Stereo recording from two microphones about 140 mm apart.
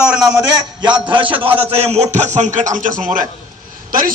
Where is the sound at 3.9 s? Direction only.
80° right.